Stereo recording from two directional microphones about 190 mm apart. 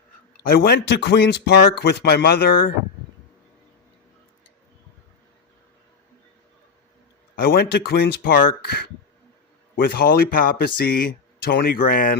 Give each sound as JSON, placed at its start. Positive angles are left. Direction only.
{"t": 0.3, "sound": "speech", "side_deg": 55}
{"t": 7.3, "sound": "speech", "side_deg": 55}